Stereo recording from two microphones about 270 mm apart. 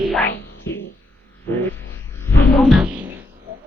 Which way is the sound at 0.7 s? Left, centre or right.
Centre.